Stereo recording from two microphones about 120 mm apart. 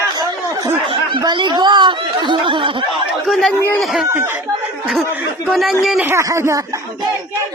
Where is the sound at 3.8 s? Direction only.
Centre (ahead or behind).